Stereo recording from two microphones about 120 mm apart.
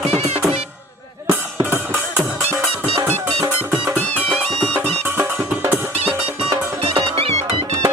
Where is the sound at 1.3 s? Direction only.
20° right (ahead or behind).